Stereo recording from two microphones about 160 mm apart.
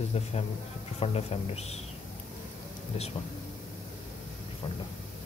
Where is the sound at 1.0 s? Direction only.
40° left (ahead or behind).